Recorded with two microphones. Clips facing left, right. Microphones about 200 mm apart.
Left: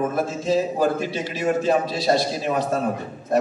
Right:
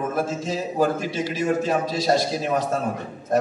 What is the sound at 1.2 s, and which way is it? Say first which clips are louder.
Speech: right 2 dB; 45° right (ahead or behind).